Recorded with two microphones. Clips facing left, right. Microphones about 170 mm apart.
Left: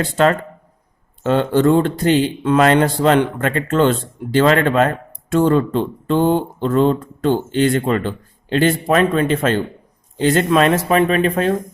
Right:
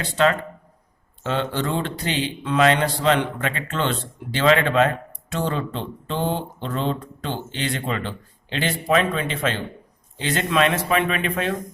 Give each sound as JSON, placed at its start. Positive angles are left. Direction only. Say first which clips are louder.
{"t": 0.0, "sound": "speech", "louder": "left 4 dB", "side_deg": 45}